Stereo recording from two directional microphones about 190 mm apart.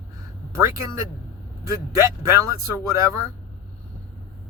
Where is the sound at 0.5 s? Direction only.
15° right (ahead or behind).